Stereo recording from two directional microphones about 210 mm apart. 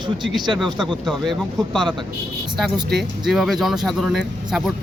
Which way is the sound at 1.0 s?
Centre (ahead or behind).